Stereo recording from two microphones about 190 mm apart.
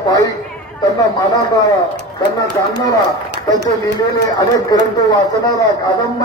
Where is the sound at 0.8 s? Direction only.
20° left (ahead or behind).